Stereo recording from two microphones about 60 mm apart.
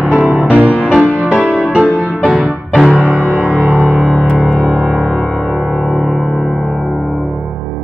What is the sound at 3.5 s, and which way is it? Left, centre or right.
Music, centre.